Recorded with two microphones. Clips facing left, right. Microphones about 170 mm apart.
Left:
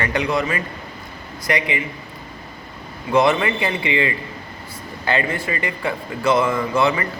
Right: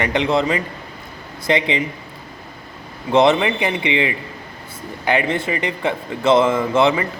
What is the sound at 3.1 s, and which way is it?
Speech, 20° right (ahead or behind).